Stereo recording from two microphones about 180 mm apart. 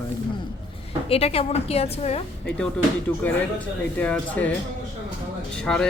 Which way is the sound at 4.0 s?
10° left (ahead or behind).